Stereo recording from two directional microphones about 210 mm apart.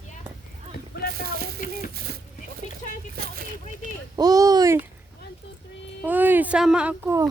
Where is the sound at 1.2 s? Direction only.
45° right (ahead or behind).